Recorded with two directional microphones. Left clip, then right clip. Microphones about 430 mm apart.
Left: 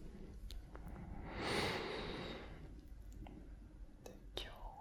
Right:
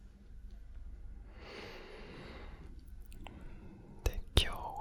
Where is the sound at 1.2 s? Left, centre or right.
Left; by 2.5 s centre.